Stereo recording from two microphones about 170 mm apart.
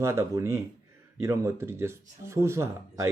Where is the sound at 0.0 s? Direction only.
15° right (ahead or behind).